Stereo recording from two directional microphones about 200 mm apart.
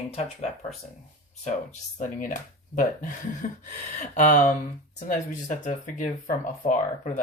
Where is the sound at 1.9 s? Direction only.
40° left (ahead or behind).